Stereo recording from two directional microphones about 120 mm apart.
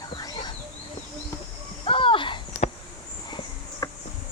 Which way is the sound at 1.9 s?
45° left (ahead or behind).